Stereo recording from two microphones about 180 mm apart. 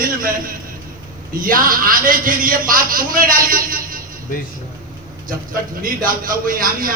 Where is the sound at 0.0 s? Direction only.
50° right (ahead or behind).